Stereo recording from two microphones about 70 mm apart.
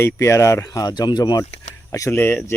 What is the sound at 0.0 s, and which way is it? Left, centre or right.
Speech, left.